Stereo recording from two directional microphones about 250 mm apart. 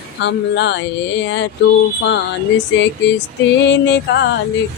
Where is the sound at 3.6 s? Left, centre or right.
Left.